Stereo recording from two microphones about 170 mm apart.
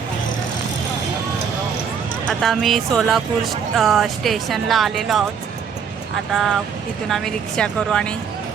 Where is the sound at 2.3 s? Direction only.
Centre (ahead or behind).